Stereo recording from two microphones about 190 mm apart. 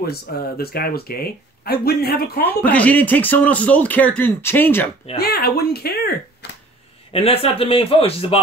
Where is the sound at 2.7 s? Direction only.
10° left (ahead or behind).